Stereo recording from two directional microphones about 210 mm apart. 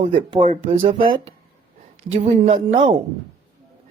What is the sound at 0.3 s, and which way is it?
Speech, 30° right (ahead or behind).